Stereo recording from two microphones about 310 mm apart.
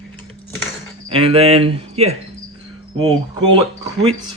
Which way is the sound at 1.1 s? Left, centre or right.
Centre.